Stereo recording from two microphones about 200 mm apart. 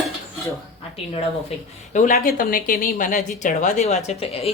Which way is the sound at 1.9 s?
40° left (ahead or behind).